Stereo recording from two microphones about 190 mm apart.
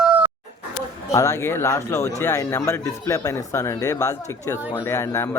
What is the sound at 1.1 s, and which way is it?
A man's voice, 15° left (ahead or behind).